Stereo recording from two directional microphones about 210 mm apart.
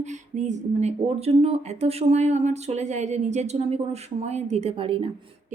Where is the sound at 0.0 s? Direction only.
35° right (ahead or behind).